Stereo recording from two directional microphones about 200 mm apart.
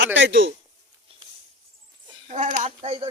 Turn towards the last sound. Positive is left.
turn(degrees=-30)  # may be behind; listen again after turning